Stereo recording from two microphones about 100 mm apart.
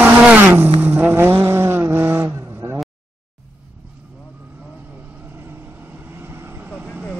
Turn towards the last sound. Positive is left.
turn(degrees=-15)  # may be behind; listen again after turning